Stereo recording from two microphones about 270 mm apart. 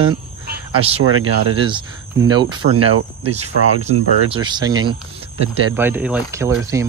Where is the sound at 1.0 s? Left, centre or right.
Right.